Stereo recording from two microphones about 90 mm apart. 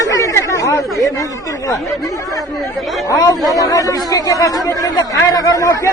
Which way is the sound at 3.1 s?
45° left (ahead or behind).